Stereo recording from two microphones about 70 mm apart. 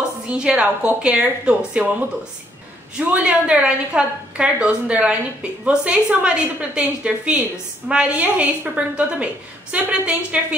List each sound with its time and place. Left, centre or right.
0.3 s a woman's voice: centre